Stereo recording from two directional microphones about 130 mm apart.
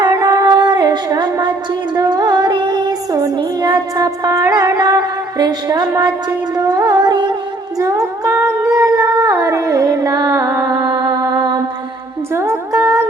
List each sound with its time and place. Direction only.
0.0 s music: 35° right (ahead or behind)
7.8 s humming: 25° right (ahead or behind)
10.7 s music: 30° right (ahead or behind)